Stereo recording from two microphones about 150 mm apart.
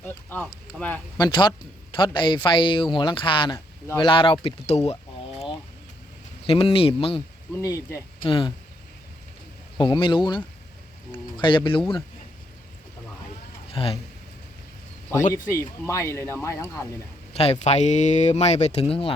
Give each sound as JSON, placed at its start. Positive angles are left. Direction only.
{"t": 0.0, "sound": "a sound", "side_deg": 10}
{"t": 0.8, "sound": "speech", "side_deg": 10}
{"t": 1.2, "sound": "speech", "side_deg": 30}
{"t": 6.4, "sound": "speech", "side_deg": 40}
{"t": 7.5, "sound": "speech", "side_deg": 20}
{"t": 8.2, "sound": "speech", "side_deg": 35}
{"t": 9.7, "sound": "speech", "side_deg": 30}
{"t": 13.7, "sound": "speech", "side_deg": 40}
{"t": 15.3, "sound": "speech", "side_deg": 20}
{"t": 17.3, "sound": "speech", "side_deg": 45}